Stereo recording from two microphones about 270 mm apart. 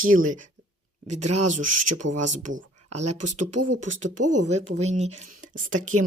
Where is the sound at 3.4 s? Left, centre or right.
Right.